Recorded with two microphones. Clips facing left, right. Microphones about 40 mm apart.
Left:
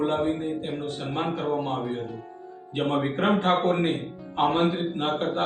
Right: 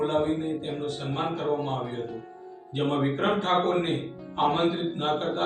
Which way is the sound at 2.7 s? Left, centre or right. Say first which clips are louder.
Left 1 dB; left.